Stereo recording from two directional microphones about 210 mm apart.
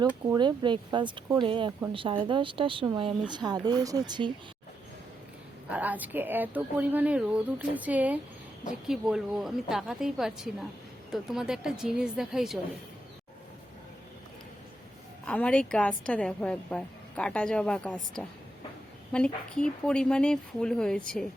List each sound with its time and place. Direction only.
0.0 s speech: 20° right (ahead or behind)
5.6 s a woman's voice: 5° right (ahead or behind)
15.3 s a woman's voice: 5° left (ahead or behind)